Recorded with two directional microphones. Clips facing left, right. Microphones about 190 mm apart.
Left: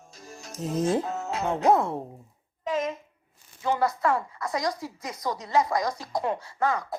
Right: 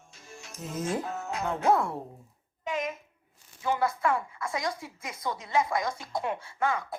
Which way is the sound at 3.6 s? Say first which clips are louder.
Left 3 dB; 30° left (ahead or behind).